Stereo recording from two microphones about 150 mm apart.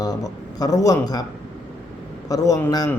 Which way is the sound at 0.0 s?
25° left (ahead or behind).